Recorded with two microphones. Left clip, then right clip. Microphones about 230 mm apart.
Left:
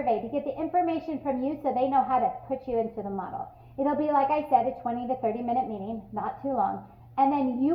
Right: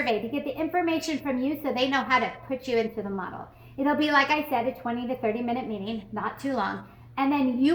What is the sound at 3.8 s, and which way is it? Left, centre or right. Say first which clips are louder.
A woman's voice: right 2 dB; right.